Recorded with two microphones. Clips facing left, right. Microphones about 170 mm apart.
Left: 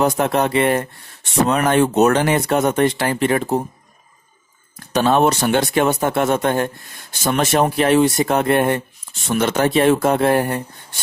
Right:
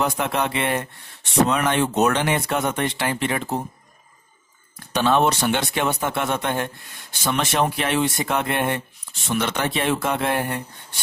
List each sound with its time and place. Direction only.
0.0 s speech: 40° left (ahead or behind)
4.9 s speech: 45° left (ahead or behind)